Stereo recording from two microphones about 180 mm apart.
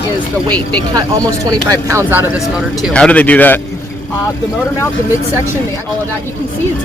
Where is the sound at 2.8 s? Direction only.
5° left (ahead or behind).